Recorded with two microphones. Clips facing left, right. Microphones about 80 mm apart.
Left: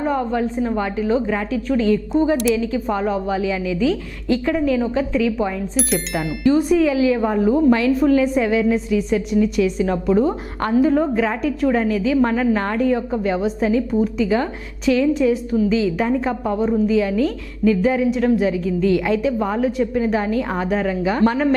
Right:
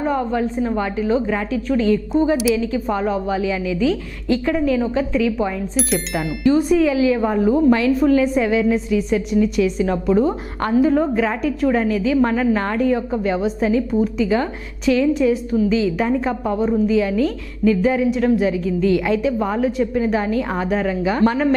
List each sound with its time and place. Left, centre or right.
0.0 s a woman's voice: right
5.7 s speech: centre
6.5 s a woman's voice: centre